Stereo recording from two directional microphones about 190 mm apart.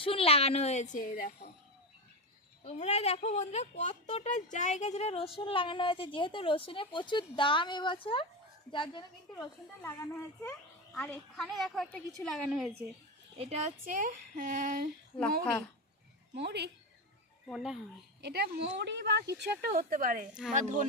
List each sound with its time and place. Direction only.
0.0 s a woman's voice: 30° left (ahead or behind); by 1.3 s 45° left (ahead or behind)
2.6 s speech: 35° left (ahead or behind)
9.8 s a woman's voice: 10° left (ahead or behind)
13.4 s a woman's voice: 35° right (ahead or behind)
16.3 s speech: 60° right (ahead or behind)
17.5 s a woman's voice: centre (ahead or behind)
18.2 s a woman's voice: 60° right (ahead or behind); by 20.8 s 40° right (ahead or behind)